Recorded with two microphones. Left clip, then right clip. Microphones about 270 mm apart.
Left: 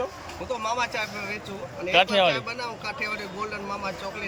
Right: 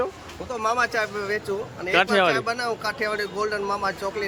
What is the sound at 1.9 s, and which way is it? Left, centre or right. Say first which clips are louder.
Speech: right 1 dB; centre.